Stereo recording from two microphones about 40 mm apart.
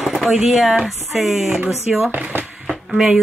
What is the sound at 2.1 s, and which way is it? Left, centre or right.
Speech, right.